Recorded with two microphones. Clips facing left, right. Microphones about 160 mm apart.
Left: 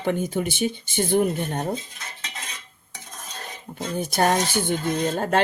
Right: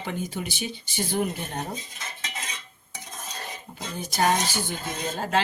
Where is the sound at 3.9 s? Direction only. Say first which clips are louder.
Left 3 dB; 55° left (ahead or behind).